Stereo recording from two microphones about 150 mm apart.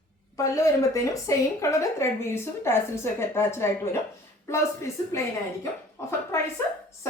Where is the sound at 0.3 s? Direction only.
20° left (ahead or behind).